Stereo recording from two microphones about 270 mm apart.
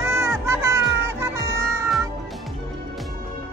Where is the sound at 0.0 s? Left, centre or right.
Centre.